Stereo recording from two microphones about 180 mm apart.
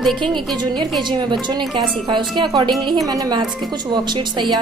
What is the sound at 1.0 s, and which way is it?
A woman's voice, 25° right (ahead or behind).